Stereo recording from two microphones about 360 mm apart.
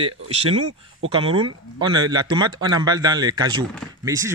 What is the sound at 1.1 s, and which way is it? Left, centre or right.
Speech, centre.